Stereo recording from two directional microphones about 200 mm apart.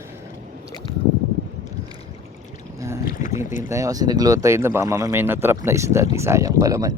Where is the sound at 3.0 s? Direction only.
40° left (ahead or behind).